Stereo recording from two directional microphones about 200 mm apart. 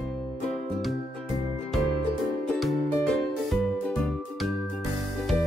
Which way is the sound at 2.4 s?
Centre (ahead or behind).